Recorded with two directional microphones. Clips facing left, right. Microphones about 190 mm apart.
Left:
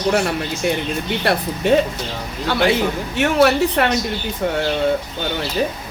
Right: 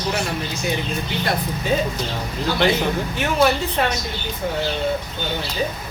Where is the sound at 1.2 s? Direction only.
70° left (ahead or behind).